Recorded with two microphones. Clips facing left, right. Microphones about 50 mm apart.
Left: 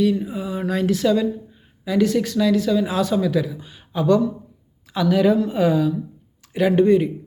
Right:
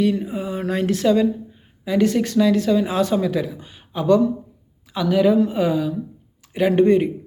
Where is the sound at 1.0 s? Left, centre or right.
Right.